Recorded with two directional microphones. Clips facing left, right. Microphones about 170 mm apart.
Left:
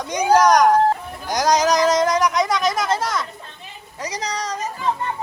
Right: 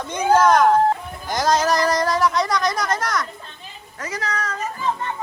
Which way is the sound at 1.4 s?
15° left (ahead or behind).